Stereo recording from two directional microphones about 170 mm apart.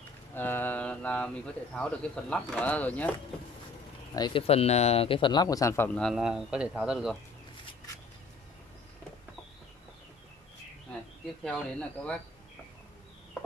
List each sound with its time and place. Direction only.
0.3 s speech: 10° left (ahead or behind)
4.1 s speech: 25° left (ahead or behind)
5.9 s speech: centre (ahead or behind)
11.4 s speech: 5° left (ahead or behind)